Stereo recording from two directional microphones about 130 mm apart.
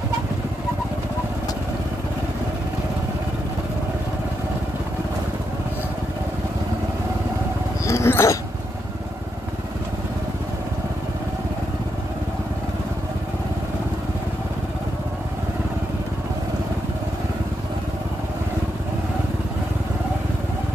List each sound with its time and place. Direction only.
7.8 s dog: 20° left (ahead or behind)